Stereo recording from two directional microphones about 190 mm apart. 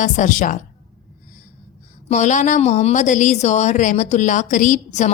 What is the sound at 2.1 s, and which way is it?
A woman's voice, 40° left (ahead or behind).